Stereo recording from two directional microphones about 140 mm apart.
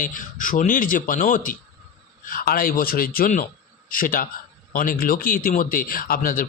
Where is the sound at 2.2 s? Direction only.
90° left.